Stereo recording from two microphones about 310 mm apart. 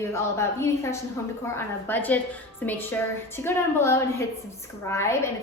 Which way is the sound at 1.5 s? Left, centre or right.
Centre.